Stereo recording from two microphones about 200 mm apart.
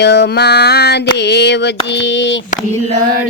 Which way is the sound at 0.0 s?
60° left (ahead or behind).